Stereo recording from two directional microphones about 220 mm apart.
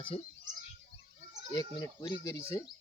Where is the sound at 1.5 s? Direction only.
20° left (ahead or behind).